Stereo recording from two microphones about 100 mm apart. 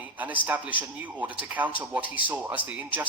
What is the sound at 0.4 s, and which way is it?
A man's voice, 15° right (ahead or behind).